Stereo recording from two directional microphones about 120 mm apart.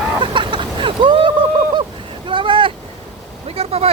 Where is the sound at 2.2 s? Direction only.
45° right (ahead or behind).